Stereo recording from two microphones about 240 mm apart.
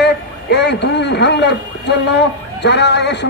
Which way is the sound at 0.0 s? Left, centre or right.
Left.